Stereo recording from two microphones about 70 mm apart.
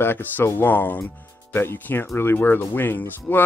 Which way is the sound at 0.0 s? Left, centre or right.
Left.